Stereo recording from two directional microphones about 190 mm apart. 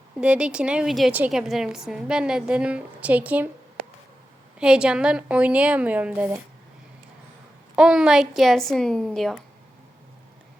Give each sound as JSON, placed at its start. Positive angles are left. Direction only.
{"t": 0.2, "sound": "a woman's voice", "side_deg": -5}
{"t": 3.8, "sound": "a sound", "side_deg": -60}
{"t": 4.6, "sound": "a woman's voice", "side_deg": -5}
{"t": 7.8, "sound": "a woman's voice", "side_deg": -5}